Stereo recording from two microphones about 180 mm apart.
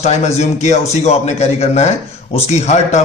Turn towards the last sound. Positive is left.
turn(degrees=35)  # may be behind; listen again after turning